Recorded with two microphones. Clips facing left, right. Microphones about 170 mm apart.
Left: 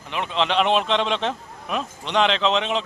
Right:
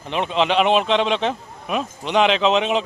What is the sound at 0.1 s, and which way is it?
Speech, 20° right (ahead or behind).